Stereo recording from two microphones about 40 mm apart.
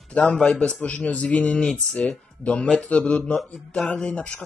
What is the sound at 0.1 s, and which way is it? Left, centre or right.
A man's voice, left.